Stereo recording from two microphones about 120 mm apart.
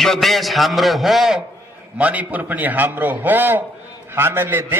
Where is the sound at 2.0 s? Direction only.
15° right (ahead or behind).